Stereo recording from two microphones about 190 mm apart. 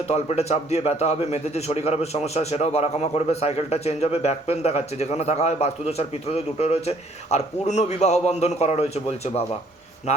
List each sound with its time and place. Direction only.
0.1 s a man's voice: 35° left (ahead or behind)